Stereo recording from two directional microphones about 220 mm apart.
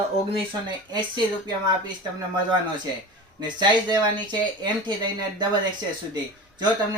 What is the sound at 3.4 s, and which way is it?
Speech, 20° right (ahead or behind).